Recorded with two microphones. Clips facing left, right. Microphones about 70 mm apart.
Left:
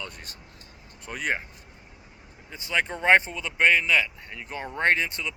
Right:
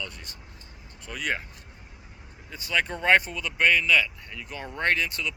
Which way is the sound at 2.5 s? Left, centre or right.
Left.